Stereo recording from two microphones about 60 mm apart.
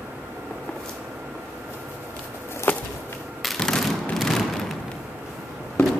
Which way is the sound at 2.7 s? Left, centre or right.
Left.